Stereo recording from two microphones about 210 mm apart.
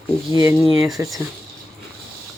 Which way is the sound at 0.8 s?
Centre (ahead or behind).